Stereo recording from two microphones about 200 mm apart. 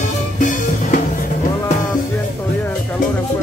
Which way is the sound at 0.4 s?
40° left (ahead or behind).